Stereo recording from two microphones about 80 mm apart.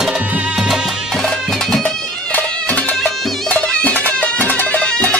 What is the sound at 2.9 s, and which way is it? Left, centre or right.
Music, centre.